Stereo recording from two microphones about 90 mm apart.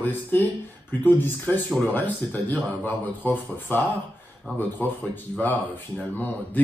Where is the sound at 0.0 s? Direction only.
20° left (ahead or behind).